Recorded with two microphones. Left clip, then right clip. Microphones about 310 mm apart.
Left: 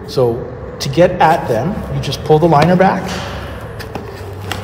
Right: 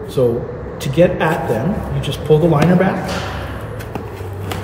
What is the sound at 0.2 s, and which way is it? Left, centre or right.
Speech, left.